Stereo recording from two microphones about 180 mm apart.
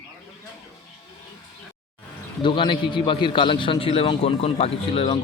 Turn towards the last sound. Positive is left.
turn(degrees=35)  # may be behind; listen again after turning